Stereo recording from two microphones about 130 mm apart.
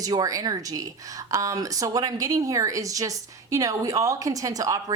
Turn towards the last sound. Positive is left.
turn(degrees=-30)  # may be behind; listen again after turning